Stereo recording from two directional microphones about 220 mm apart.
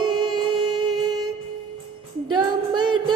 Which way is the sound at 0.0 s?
20° right (ahead or behind).